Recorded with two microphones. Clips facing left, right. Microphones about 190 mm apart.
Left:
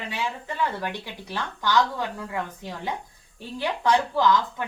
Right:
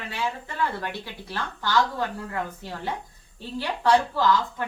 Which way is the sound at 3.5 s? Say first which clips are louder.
Right 1 dB; 15° left (ahead or behind).